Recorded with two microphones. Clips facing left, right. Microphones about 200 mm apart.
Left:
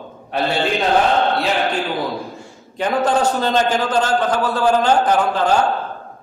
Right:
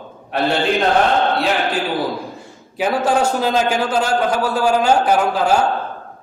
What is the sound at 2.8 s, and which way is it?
A man's voice, 10° right (ahead or behind).